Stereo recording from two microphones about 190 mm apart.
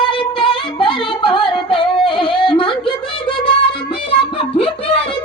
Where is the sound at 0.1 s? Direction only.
25° left (ahead or behind).